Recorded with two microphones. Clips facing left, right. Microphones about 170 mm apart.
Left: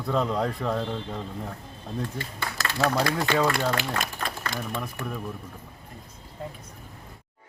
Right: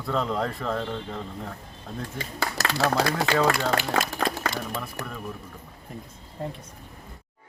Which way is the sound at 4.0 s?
90° right.